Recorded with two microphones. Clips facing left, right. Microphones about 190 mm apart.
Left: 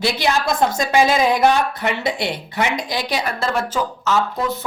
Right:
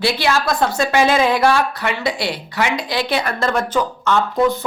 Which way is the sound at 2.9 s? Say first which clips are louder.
Right 3 dB; 10° left (ahead or behind).